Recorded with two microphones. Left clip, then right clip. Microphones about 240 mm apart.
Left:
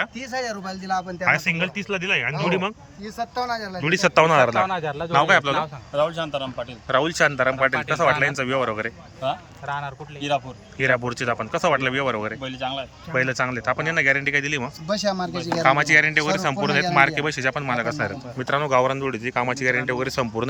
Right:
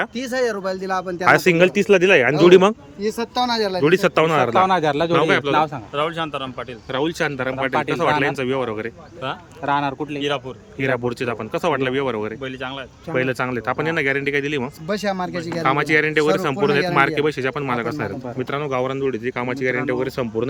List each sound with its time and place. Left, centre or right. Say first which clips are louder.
0.2 s speech: right 7 dB; right
3.8 s speech: even; centre
4.5 s a man's voice: right 6 dB; right
5.1 s speech: left 2 dB; centre
9.6 s speech: right 8 dB; right
10.2 s speech: left 3 dB; centre